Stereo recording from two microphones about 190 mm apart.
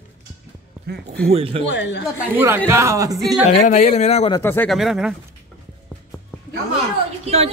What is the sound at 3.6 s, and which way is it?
Speech, 35° left (ahead or behind).